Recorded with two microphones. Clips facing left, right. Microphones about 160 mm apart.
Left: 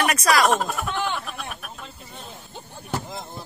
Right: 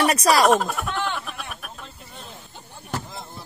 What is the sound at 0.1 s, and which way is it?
Speech, 35° right (ahead or behind).